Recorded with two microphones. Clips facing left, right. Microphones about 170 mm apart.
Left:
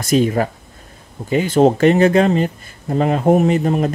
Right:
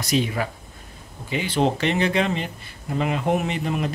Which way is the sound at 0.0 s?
45° left (ahead or behind).